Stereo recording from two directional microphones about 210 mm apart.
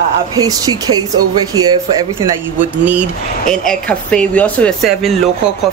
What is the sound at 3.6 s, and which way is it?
Speech, 5° left (ahead or behind).